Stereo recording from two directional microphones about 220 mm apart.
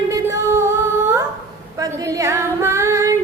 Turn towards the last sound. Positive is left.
turn(degrees=-15)  # may be behind; listen again after turning